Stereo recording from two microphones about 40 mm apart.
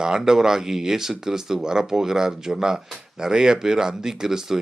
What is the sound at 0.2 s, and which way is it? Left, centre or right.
Speech, centre.